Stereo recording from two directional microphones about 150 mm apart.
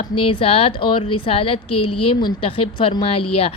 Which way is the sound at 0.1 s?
35° left (ahead or behind).